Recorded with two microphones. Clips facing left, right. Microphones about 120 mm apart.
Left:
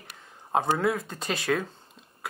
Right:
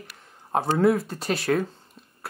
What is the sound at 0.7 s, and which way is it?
Speech, 10° right (ahead or behind).